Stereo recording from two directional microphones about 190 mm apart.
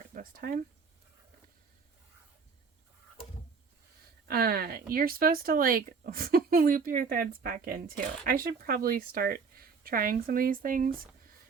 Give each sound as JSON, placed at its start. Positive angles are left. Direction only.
{"t": 0.1, "sound": "speech", "side_deg": -50}
{"t": 4.3, "sound": "speech", "side_deg": -55}